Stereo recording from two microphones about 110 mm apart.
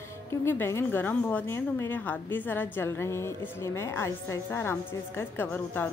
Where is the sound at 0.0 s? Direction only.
25° left (ahead or behind).